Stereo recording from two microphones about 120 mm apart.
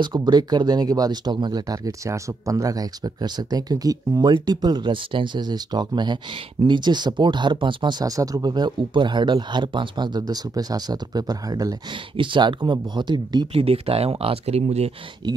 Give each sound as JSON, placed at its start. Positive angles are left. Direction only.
{"t": 0.0, "sound": "speech", "side_deg": -35}
{"t": 12.2, "sound": "speech", "side_deg": -40}
{"t": 13.5, "sound": "speech", "side_deg": -55}